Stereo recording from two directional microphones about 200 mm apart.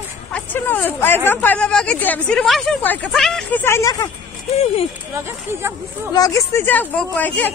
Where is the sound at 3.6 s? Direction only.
15° left (ahead or behind).